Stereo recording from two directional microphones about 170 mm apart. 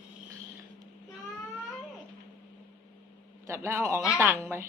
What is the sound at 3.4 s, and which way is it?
A man's voice, 15° right (ahead or behind).